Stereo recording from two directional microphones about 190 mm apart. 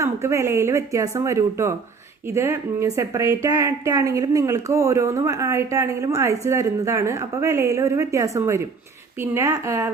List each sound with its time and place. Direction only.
0.0 s speech: 15° right (ahead or behind)